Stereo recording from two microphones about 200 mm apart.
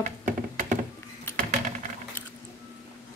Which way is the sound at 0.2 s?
40° right (ahead or behind).